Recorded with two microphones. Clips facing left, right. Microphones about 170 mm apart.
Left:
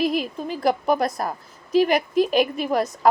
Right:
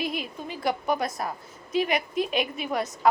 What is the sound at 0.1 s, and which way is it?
A woman's voice, 40° left (ahead or behind).